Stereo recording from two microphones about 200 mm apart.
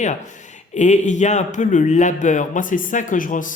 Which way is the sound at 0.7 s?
35° left (ahead or behind).